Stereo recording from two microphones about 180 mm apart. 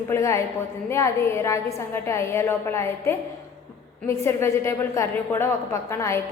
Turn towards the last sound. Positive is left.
turn(degrees=15)  # may be behind; listen again after turning